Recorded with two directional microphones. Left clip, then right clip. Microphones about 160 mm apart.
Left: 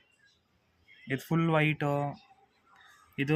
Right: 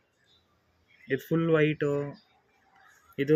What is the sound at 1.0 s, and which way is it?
Speech, 90° left.